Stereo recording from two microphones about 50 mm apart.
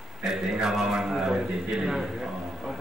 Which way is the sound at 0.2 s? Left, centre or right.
Centre.